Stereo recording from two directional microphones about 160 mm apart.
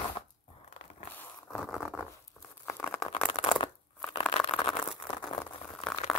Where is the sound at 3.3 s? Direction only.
35° left (ahead or behind).